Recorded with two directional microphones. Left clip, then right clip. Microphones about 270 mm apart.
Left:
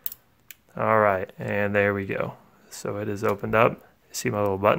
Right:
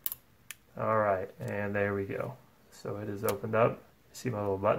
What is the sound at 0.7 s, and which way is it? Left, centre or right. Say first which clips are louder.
Speech: left 8 dB; left.